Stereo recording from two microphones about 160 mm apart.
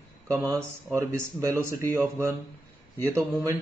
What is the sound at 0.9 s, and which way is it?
Speech, 20° right (ahead or behind).